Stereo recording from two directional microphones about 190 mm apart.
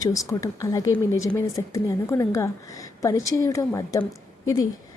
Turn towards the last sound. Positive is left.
turn(degrees=20)  # may be behind; listen again after turning